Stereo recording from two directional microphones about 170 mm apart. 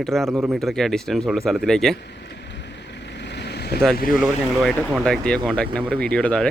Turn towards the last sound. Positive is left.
turn(degrees=5)  # may be behind; listen again after turning